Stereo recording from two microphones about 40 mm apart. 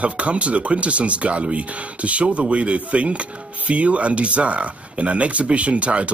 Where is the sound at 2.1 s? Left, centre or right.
Right.